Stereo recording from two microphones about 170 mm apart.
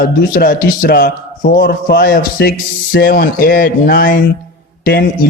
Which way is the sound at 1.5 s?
70° left (ahead or behind).